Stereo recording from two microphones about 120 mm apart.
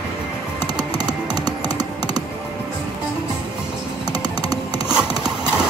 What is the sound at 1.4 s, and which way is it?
Music, 35° right (ahead or behind).